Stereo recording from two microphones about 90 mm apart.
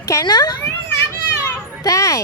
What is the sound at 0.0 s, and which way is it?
Speech, 40° left (ahead or behind).